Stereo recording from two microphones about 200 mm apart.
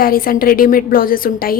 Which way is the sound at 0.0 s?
45° left (ahead or behind).